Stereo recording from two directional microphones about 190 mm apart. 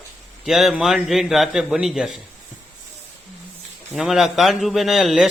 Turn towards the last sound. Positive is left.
turn(degrees=0)  # may be behind; listen again after turning